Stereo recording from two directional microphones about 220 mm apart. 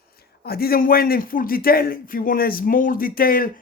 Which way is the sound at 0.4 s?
45° left (ahead or behind).